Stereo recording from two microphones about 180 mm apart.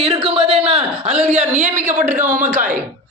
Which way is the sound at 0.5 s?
30° right (ahead or behind).